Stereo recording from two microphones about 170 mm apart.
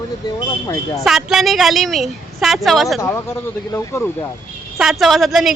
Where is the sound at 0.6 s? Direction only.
20° left (ahead or behind).